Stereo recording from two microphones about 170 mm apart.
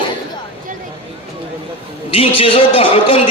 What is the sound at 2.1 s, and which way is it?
A man's voice, 35° left (ahead or behind).